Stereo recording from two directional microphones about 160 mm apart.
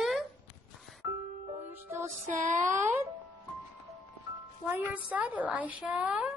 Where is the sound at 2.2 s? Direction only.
55° right (ahead or behind).